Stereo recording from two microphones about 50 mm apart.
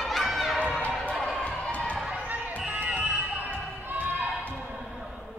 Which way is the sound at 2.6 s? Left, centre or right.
Right.